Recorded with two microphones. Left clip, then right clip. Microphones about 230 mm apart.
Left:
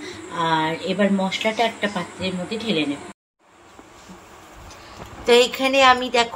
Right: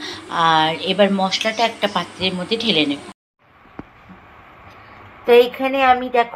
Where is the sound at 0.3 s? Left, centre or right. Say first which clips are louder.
Right 6 dB; centre.